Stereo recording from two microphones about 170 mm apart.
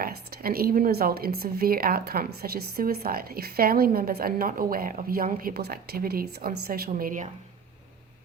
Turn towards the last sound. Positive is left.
turn(degrees=-50)  # may be behind; listen again after turning